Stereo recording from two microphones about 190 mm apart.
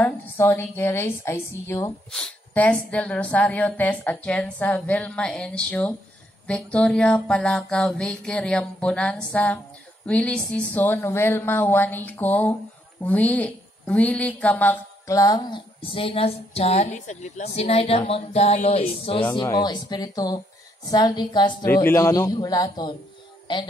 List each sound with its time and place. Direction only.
0.0 s a woman's voice: 10° left (ahead or behind)
6.4 s a sound: 5° left (ahead or behind)
10.0 s a woman's voice: 5° left (ahead or behind); by 21.6 s 25° left (ahead or behind)
21.6 s a woman's voice: 10° left (ahead or behind)